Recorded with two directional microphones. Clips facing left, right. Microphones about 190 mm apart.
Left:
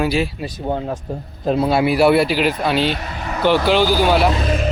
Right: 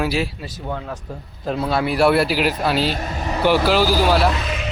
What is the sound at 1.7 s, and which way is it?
Speech, 10° left (ahead or behind).